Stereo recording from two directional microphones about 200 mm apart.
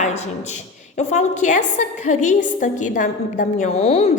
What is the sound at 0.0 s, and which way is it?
A woman's voice, 35° left (ahead or behind).